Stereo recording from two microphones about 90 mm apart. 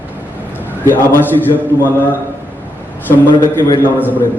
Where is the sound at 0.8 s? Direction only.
25° left (ahead or behind).